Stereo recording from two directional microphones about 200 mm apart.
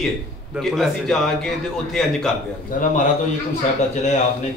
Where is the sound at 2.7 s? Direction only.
40° left (ahead or behind).